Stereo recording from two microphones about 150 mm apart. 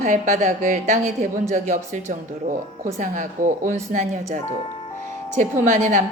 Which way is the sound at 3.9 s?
55° right (ahead or behind).